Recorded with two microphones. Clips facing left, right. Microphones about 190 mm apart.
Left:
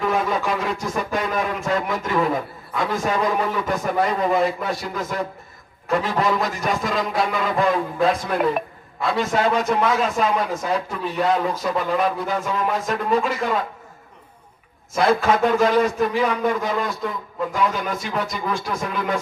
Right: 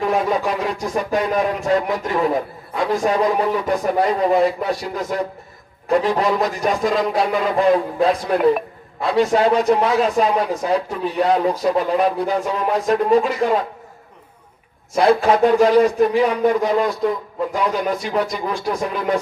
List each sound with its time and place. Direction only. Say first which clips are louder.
0.0 s a sound: right 3 dB; 40° right (ahead or behind)
0.4 s a man's voice: right 2 dB; 35° right (ahead or behind)
14.9 s a man's voice: right 4 dB; 35° right (ahead or behind)